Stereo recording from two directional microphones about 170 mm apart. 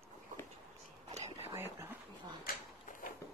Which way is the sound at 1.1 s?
40° right (ahead or behind).